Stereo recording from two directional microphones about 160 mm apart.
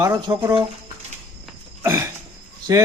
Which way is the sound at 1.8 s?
15° right (ahead or behind).